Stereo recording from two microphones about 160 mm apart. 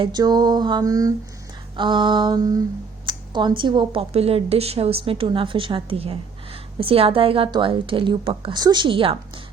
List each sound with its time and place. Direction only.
0.0 s mantra: 25° right (ahead or behind)
3.1 s speech: 30° right (ahead or behind)